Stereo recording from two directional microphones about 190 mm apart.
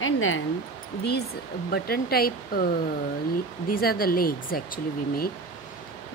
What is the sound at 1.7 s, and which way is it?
Speech, 55° left (ahead or behind).